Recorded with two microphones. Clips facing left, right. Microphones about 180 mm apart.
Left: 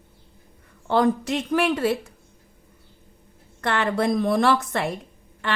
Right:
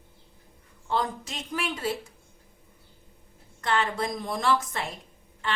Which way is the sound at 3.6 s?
65° left (ahead or behind).